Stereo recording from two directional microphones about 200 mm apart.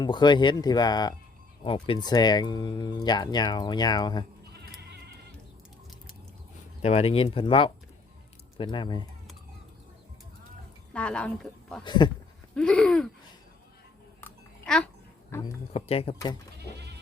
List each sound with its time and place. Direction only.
0.0 s speech: 20° left (ahead or behind)
6.8 s speech: 30° left (ahead or behind)
10.9 s speech: 5° left (ahead or behind)
11.8 s speech: 25° left (ahead or behind)
12.5 s a sound: 5° left (ahead or behind)
14.2 s a sound: 5° left (ahead or behind)
15.4 s speech: 30° left (ahead or behind)
16.1 s speech: 20° left (ahead or behind)